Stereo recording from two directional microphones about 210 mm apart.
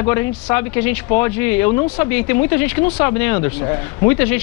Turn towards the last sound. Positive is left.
turn(degrees=10)  # may be behind; listen again after turning